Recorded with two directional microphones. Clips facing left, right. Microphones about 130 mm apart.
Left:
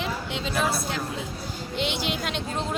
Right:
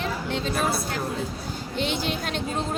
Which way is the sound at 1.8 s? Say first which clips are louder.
Right 1 dB; 45° right (ahead or behind).